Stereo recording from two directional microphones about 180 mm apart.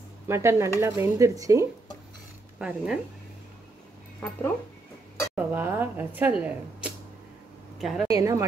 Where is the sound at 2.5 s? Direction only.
5° right (ahead or behind).